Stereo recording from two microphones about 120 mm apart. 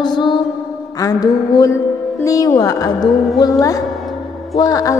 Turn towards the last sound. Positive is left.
turn(degrees=30)  # may be behind; listen again after turning